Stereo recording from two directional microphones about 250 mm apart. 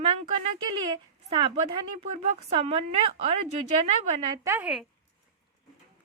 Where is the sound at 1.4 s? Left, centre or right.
Right.